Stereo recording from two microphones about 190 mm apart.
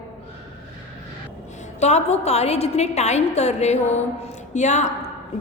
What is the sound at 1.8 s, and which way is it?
A woman's voice, 35° left (ahead or behind).